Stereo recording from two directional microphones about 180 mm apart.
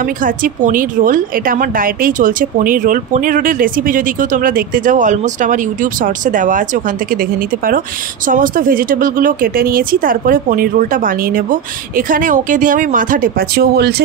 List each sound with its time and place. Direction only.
0.0 s a woman's voice: 50° right (ahead or behind)